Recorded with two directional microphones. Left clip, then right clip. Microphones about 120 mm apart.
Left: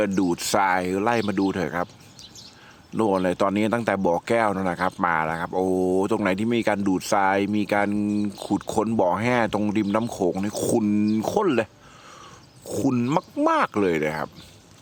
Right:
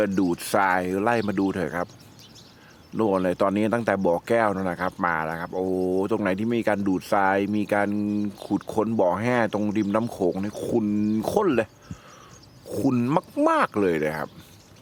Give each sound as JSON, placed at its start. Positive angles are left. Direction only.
{"t": 0.3, "sound": "speech", "side_deg": 15}
{"t": 2.9, "sound": "speech", "side_deg": 20}
{"t": 10.5, "sound": "speech", "side_deg": 45}
{"t": 11.1, "sound": "speech", "side_deg": 15}
{"t": 12.8, "sound": "speech", "side_deg": 5}
{"t": 13.6, "sound": "speech", "side_deg": 15}